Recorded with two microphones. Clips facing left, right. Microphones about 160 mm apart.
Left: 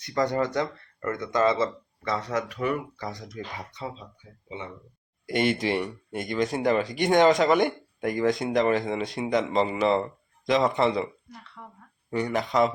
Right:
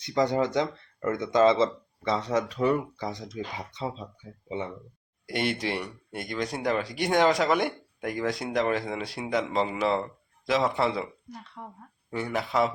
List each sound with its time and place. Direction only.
0.0 s speech: 15° right (ahead or behind)
4.0 s speech: 40° right (ahead or behind)
5.2 s speech: centre (ahead or behind)
11.6 s speech: 20° right (ahead or behind)
12.1 s speech: 5° right (ahead or behind)